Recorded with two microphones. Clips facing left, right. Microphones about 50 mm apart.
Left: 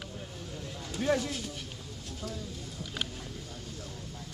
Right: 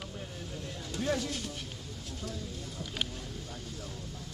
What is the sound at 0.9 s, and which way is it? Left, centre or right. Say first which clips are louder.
Speech: left 3 dB; centre.